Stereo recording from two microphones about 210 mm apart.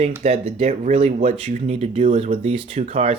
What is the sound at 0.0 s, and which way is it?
Speech, 30° right (ahead or behind).